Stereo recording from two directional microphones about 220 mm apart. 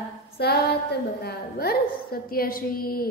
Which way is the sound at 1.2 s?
45° left (ahead or behind).